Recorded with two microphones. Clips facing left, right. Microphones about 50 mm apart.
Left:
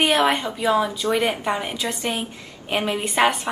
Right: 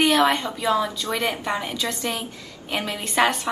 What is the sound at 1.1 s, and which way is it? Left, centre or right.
A woman's voice, left.